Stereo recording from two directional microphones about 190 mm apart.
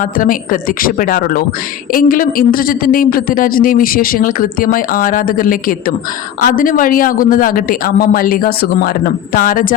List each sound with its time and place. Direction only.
0.0 s speech: 45° left (ahead or behind)